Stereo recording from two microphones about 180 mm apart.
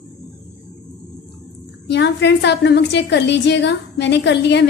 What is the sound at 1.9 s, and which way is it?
A woman's voice, 80° left.